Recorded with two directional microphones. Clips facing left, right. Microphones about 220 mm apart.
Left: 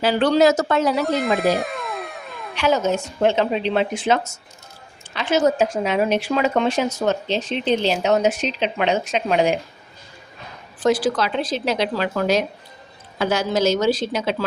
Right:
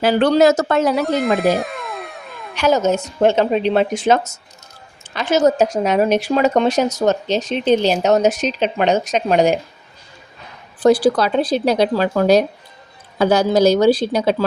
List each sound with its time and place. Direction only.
0.0 s speech: 50° right (ahead or behind)
1.0 s cat: centre (ahead or behind)
2.6 s speech: 45° right (ahead or behind)
10.8 s speech: 35° right (ahead or behind)